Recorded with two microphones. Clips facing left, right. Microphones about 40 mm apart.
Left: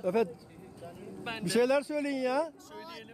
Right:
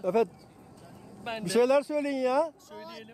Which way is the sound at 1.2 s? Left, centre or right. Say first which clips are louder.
Right 3 dB; centre.